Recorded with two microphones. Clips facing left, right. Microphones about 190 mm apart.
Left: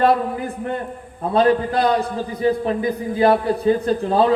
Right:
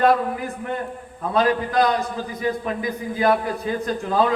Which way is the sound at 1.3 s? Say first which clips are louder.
Left 4 dB; 30° left (ahead or behind).